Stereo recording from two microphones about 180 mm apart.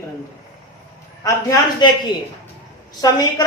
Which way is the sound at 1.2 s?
20° left (ahead or behind).